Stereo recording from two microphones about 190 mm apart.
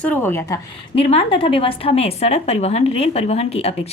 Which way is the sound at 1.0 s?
30° left (ahead or behind).